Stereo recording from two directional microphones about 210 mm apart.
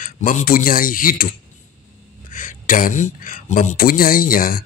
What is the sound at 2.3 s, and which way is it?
Speech, 40° left (ahead or behind).